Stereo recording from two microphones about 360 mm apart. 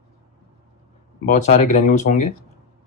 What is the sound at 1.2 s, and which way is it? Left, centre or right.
Speech, centre.